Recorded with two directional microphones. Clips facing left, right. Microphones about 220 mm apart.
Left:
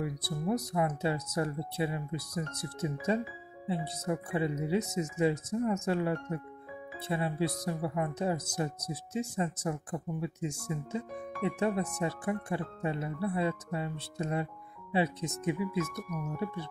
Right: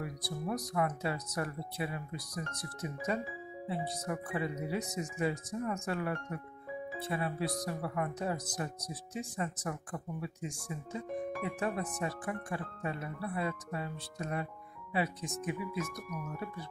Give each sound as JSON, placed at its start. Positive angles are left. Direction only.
{"t": 0.0, "sound": "speech", "side_deg": 25}